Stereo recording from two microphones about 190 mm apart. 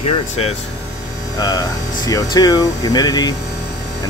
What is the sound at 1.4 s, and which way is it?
Speech, 20° left (ahead or behind).